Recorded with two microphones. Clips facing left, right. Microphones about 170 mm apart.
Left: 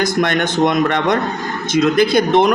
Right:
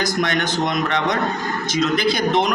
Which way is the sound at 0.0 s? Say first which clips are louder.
Left 4 dB; 55° left (ahead or behind).